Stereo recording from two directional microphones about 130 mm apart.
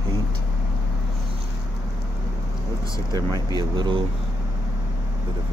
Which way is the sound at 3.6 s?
40° right (ahead or behind).